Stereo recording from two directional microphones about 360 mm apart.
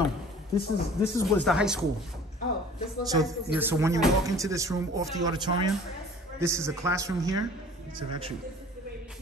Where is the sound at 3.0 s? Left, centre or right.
Centre.